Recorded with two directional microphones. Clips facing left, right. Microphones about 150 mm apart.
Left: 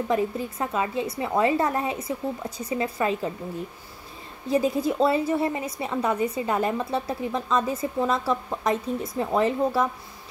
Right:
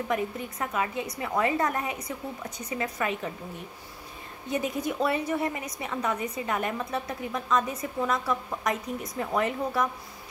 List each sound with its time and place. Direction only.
0.1 s a woman's voice: 30° left (ahead or behind)
4.5 s a woman's voice: 30° left (ahead or behind)